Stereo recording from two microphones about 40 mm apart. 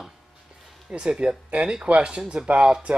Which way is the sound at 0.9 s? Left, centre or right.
Right.